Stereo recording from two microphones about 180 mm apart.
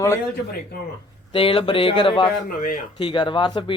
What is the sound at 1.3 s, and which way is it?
Speech, 30° left (ahead or behind).